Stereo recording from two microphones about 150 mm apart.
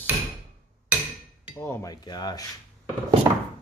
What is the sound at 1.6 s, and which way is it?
Cutlery, 20° left (ahead or behind).